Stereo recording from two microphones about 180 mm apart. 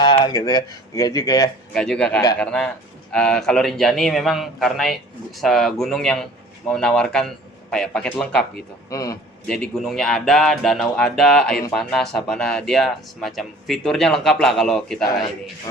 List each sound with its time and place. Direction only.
0.3 s speech: 20° left (ahead or behind)
1.7 s speech: 5° left (ahead or behind)
8.9 s speech: 20° left (ahead or behind)
9.5 s speech: centre (ahead or behind)